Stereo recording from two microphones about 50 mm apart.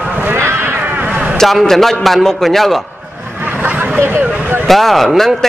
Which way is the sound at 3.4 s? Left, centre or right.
Right.